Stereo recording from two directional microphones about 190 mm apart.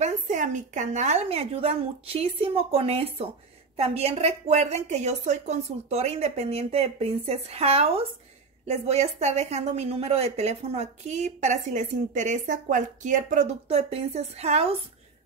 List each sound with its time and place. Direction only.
0.0 s a woman's voice: 40° right (ahead or behind)